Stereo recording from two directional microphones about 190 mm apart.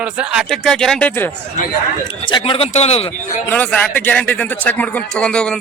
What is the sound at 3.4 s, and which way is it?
Speech, 10° left (ahead or behind).